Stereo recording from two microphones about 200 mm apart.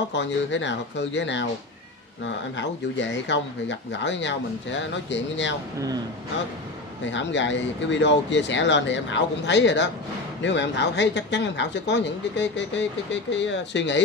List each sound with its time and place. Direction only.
0.1 s speech: 65° left (ahead or behind)
7.1 s speech: 65° left (ahead or behind)